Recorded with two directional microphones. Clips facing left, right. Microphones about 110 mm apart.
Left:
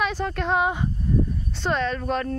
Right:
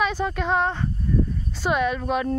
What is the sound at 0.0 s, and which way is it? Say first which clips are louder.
Speech: right 1 dB; centre (ahead or behind).